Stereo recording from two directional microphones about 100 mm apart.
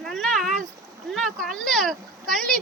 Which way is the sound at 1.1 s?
5° left (ahead or behind).